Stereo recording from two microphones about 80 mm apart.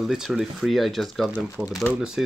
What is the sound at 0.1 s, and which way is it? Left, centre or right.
Speech, centre.